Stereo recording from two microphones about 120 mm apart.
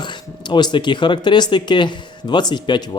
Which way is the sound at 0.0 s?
40° left (ahead or behind).